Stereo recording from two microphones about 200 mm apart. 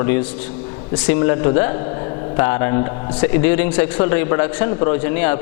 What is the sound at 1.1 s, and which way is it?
A man's voice, 20° left (ahead or behind).